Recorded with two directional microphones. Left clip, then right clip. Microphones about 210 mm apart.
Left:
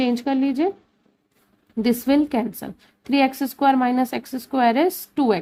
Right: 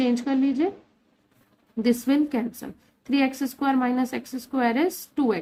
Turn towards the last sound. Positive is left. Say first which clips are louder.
# left 5 dB
turn(degrees=30)  # may be behind; listen again after turning